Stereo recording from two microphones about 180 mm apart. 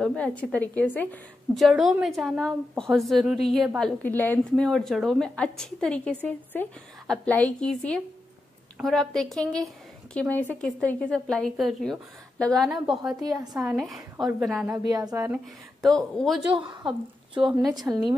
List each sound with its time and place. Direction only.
0.0 s a woman's voice: 5° left (ahead or behind)
13.1 s a woman's voice: 20° right (ahead or behind)
13.7 s a woman's voice: centre (ahead or behind)
14.9 s a woman's voice: 20° right (ahead or behind)
15.8 s a woman's voice: 5° left (ahead or behind)
16.5 s a woman's voice: 30° right (ahead or behind)
17.5 s a woman's voice: centre (ahead or behind)
17.7 s a woman's voice: 20° right (ahead or behind)